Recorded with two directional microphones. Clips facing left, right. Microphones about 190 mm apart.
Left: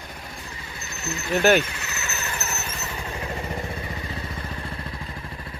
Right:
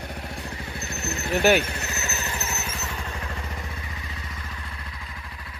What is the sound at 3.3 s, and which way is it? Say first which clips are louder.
Vehicle: left 6 dB; 35° left (ahead or behind).